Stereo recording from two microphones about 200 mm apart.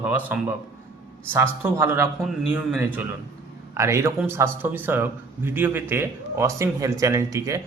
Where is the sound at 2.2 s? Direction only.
Centre (ahead or behind).